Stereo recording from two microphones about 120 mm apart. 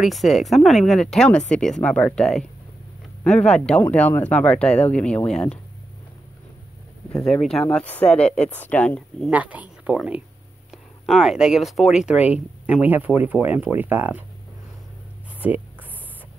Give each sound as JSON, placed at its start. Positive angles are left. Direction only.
{"t": 0.0, "sound": "speech", "side_deg": 0}
{"t": 7.2, "sound": "speech", "side_deg": 5}
{"t": 9.3, "sound": "speech", "side_deg": -10}